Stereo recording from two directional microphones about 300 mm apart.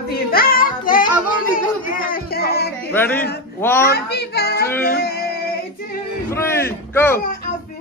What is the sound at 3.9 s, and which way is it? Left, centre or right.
Child singing, left.